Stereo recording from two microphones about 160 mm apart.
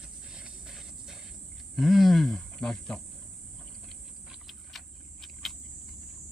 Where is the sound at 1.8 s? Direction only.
Centre (ahead or behind).